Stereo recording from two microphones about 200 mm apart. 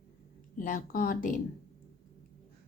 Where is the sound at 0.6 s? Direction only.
45° left (ahead or behind).